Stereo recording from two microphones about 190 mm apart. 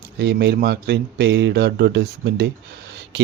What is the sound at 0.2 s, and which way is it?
Speech, 60° right (ahead or behind).